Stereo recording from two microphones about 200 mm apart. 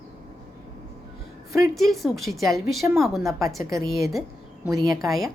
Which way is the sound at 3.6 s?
15° right (ahead or behind).